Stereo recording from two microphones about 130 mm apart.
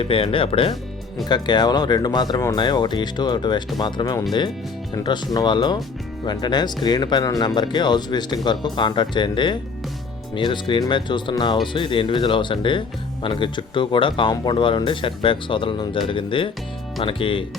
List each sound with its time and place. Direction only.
0.0 s speech: 45° left (ahead or behind)
1.2 s speech: 35° left (ahead or behind)